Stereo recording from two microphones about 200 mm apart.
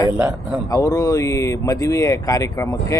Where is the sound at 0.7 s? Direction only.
20° left (ahead or behind).